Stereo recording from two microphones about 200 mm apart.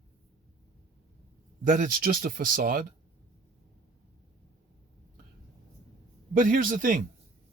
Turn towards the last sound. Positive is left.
turn(degrees=-40)  # may be behind; listen again after turning